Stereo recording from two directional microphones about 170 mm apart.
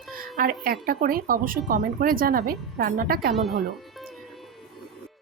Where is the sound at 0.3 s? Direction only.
60° right (ahead or behind).